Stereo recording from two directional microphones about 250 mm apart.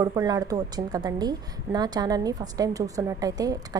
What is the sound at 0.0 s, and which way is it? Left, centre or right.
A woman's voice, centre.